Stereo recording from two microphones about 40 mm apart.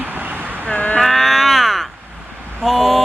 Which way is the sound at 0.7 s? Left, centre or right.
Left.